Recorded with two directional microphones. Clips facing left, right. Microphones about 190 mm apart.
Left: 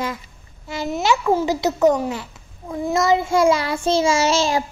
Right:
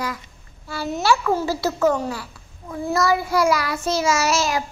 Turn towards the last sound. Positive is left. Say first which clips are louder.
# left 3 dB
turn(degrees=30)  # may be behind; listen again after turning